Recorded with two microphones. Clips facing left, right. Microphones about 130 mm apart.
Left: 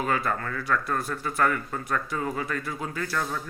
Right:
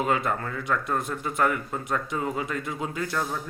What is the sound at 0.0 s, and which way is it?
A man's voice, 20° right (ahead or behind).